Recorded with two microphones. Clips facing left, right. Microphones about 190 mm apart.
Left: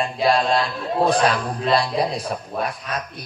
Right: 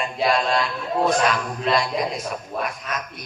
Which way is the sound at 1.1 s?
35° left (ahead or behind).